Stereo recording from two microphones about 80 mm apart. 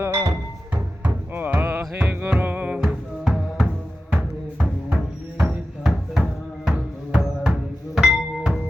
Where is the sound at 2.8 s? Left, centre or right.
Centre.